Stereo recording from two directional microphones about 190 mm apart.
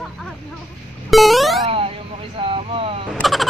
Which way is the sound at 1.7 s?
30° right (ahead or behind).